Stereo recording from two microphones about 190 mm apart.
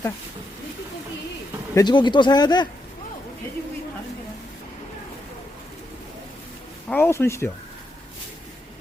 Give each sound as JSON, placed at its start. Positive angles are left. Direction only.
{"t": 1.7, "sound": "speech", "side_deg": 20}
{"t": 6.9, "sound": "speech", "side_deg": 10}